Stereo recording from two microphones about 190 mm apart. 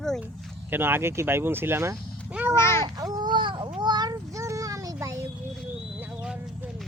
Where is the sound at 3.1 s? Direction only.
25° right (ahead or behind).